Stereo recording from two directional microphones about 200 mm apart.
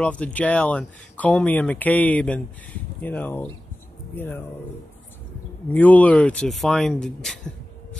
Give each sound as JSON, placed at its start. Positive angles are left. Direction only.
{"t": 0.0, "sound": "speech", "side_deg": 5}
{"t": 5.7, "sound": "speech", "side_deg": 10}